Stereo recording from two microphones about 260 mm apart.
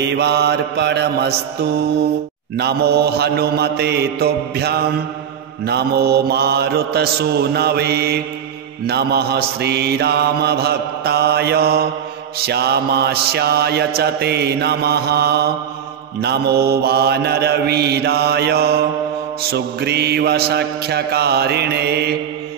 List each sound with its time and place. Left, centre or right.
0.0 s mantra: right